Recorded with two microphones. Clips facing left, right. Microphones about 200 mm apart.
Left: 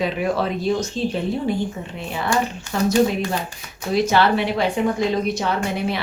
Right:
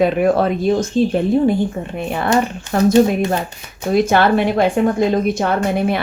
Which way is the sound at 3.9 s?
50° right (ahead or behind).